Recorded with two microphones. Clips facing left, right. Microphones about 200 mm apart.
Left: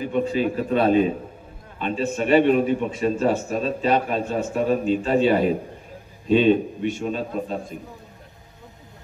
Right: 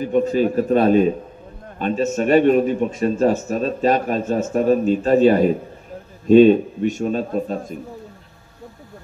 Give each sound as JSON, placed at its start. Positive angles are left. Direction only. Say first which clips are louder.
{"t": 0.1, "sound": "a man's voice", "louder": "right 6 dB", "side_deg": -45}